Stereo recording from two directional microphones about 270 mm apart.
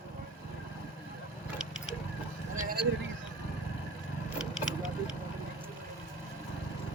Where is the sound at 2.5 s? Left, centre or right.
Right.